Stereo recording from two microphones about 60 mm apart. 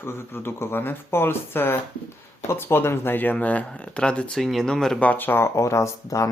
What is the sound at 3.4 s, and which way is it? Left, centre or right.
Speech, left.